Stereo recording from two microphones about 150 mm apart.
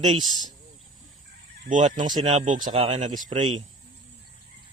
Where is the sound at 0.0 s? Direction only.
30° right (ahead or behind).